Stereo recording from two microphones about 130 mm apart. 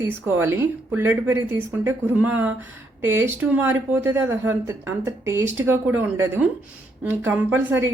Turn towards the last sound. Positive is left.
turn(degrees=-15)  # may be behind; listen again after turning